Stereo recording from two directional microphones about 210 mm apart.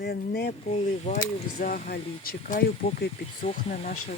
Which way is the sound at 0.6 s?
30° left (ahead or behind).